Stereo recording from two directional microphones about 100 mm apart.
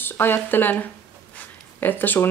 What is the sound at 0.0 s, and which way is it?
Speech, 20° left (ahead or behind).